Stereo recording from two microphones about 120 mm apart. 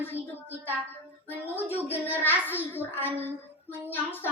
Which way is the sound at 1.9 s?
15° left (ahead or behind).